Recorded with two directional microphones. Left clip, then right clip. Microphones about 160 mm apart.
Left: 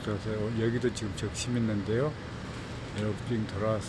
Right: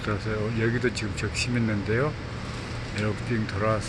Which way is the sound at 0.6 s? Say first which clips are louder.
Right 4 dB; 25° left (ahead or behind).